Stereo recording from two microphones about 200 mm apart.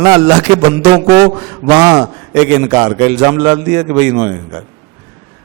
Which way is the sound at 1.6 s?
20° right (ahead or behind).